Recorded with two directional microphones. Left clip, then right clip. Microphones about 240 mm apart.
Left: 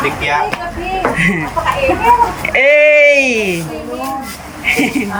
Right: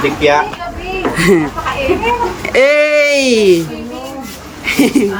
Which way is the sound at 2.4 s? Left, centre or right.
Centre.